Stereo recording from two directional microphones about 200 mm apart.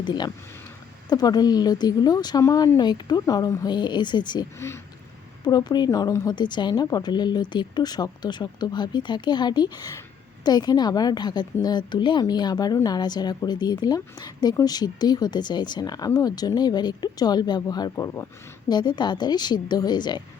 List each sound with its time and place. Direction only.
0.0 s a woman's voice: 20° left (ahead or behind)